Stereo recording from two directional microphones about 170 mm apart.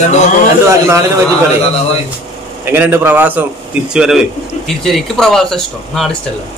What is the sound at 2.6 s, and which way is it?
A man's voice, 10° right (ahead or behind).